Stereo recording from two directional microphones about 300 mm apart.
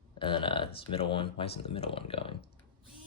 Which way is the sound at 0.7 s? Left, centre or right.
Centre.